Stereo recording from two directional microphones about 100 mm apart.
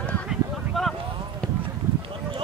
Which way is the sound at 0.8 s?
Centre (ahead or behind).